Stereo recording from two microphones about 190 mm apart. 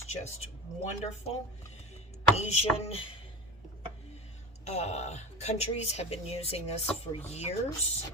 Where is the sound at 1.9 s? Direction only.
35° left (ahead or behind).